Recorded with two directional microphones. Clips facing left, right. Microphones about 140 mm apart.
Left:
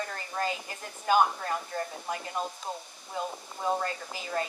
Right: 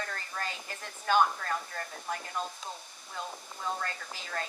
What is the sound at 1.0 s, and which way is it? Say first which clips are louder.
Speech: left 2 dB; 20° left (ahead or behind).